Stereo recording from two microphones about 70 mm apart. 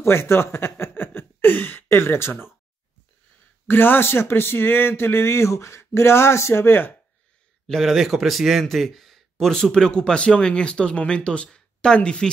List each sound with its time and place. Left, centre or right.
0.0 s a sound: left
3.6 s speech: left
7.6 s speech: centre